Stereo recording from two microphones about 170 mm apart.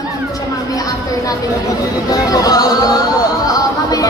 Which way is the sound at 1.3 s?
20° left (ahead or behind).